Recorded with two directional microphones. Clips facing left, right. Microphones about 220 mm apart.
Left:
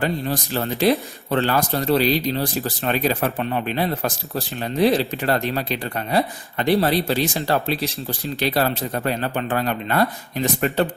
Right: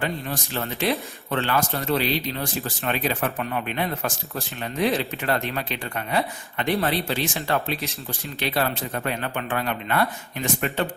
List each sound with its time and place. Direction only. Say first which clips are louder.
0.0 s speech: left 5 dB; 35° left (ahead or behind)